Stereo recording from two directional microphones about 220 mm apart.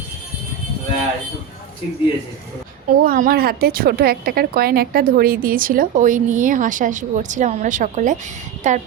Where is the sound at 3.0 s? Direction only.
40° right (ahead or behind).